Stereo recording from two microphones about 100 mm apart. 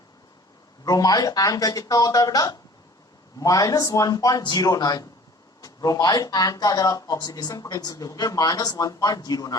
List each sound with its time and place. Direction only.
0.9 s speech: 40° left (ahead or behind)